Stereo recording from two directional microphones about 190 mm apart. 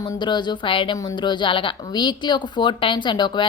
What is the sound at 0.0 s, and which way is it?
A woman's voice, 25° left (ahead or behind).